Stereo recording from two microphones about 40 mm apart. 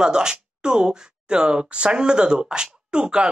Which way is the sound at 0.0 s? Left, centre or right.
Centre.